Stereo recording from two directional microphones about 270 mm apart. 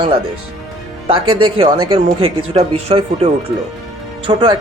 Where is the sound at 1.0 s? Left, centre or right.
Centre.